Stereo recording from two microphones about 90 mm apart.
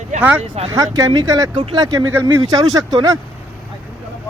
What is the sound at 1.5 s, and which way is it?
Speech, 60° right (ahead or behind).